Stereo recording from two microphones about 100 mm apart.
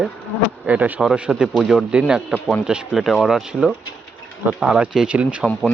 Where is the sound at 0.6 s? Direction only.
15° right (ahead or behind).